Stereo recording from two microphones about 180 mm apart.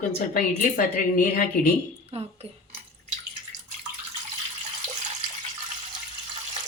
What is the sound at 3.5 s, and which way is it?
Water, 45° right (ahead or behind).